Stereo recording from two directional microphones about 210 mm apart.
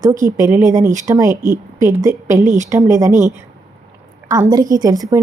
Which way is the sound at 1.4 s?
40° right (ahead or behind).